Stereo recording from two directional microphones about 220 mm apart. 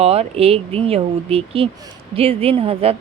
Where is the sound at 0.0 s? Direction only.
25° right (ahead or behind).